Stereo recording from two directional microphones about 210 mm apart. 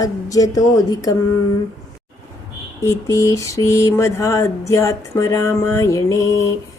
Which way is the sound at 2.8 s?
15° left (ahead or behind).